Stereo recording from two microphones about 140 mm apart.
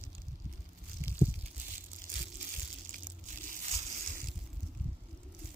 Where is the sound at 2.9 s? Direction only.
70° right (ahead or behind).